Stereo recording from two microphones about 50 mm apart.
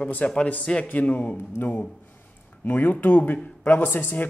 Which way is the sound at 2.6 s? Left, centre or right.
Left.